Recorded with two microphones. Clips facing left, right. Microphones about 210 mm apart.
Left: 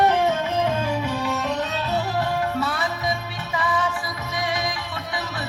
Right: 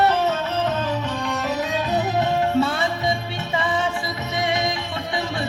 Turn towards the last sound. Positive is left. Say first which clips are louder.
# right 3 dB
turn(degrees=-25)  # may be behind; listen again after turning